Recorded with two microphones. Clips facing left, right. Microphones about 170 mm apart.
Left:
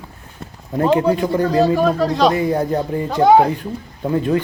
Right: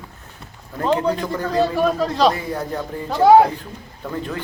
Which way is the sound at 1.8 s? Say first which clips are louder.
Left 2 dB; centre (ahead or behind).